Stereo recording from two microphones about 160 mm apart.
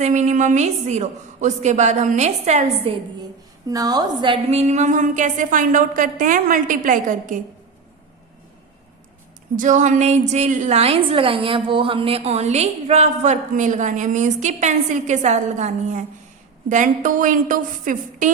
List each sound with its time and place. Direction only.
0.0 s a woman's voice: 45° right (ahead or behind)
3.7 s a woman's voice: 25° right (ahead or behind)
4.5 s a woman's voice: 45° right (ahead or behind)
9.6 s a woman's voice: 50° right (ahead or behind)